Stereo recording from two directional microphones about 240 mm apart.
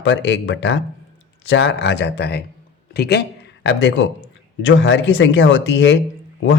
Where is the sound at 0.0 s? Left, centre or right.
Left.